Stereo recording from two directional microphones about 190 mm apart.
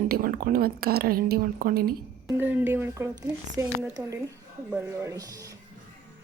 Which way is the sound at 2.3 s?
10° right (ahead or behind).